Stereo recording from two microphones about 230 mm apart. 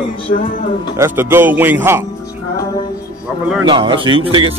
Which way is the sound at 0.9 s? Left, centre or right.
Centre.